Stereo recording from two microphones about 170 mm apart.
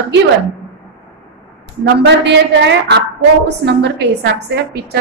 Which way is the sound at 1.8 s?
90° right.